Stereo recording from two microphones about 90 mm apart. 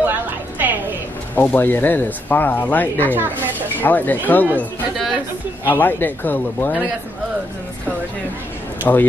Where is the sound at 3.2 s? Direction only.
20° right (ahead or behind).